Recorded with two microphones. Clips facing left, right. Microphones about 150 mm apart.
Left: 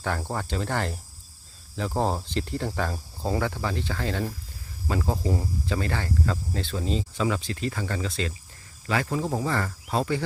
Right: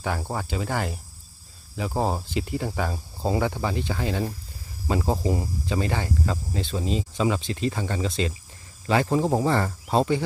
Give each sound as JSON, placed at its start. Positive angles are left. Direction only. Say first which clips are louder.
{"t": 0.0, "sound": "speech", "louder": "right 1 dB", "side_deg": -10}